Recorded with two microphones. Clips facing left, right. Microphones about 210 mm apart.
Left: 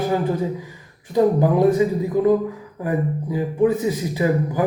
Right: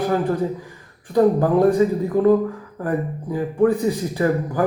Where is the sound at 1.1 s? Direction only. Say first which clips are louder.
Right 1 dB; 20° left (ahead or behind).